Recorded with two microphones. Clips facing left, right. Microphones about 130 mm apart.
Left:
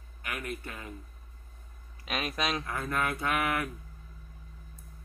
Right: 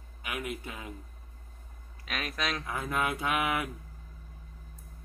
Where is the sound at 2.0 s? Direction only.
20° left (ahead or behind).